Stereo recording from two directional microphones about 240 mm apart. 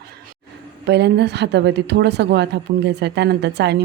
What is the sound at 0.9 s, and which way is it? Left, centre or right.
A woman's voice, right.